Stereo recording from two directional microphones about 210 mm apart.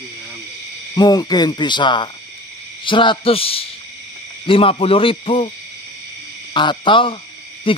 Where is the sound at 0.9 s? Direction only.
20° left (ahead or behind).